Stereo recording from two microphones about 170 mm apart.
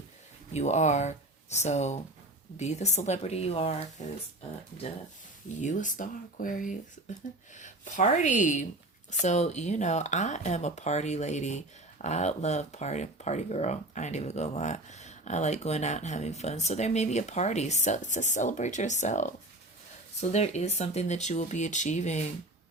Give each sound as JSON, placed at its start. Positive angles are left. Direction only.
{"t": 0.5, "sound": "speech", "side_deg": 45}
{"t": 5.5, "sound": "speech", "side_deg": 45}
{"t": 20.3, "sound": "speech", "side_deg": 40}